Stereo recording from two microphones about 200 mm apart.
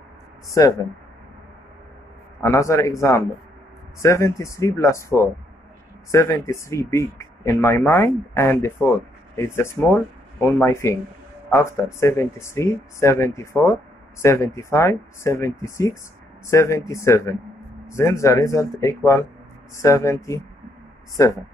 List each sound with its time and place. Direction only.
0.6 s speech: 15° left (ahead or behind)
2.4 s speech: 15° left (ahead or behind)